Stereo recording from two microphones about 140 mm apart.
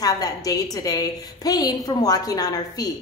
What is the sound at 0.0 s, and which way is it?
A woman's voice, 25° left (ahead or behind).